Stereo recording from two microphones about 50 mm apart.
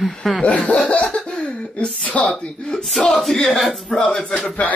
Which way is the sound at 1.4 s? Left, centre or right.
Left.